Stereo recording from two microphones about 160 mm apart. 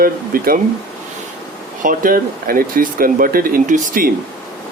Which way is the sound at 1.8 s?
60° right (ahead or behind).